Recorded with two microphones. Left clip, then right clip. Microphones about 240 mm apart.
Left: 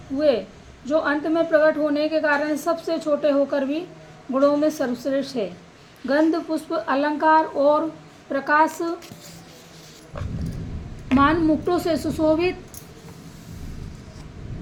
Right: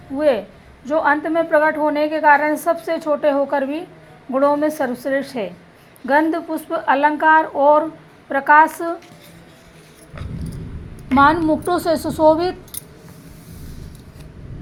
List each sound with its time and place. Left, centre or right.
0.9 s a woman's voice: right
11.1 s a woman's voice: centre